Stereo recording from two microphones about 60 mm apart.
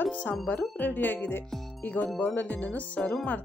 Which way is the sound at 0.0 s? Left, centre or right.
Left.